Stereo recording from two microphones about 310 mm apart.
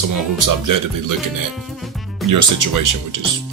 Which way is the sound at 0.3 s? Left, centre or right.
Right.